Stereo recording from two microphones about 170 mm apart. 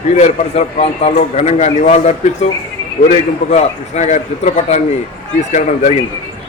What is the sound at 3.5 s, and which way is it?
A man's voice, 40° left (ahead or behind).